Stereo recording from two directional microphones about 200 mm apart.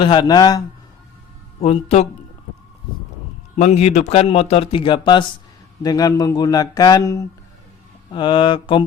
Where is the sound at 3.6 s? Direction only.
35° left (ahead or behind).